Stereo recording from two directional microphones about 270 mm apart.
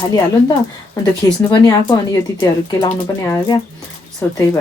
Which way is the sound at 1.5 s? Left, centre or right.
Centre.